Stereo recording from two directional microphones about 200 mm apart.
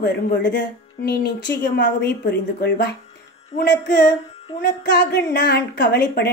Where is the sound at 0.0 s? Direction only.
60° left (ahead or behind).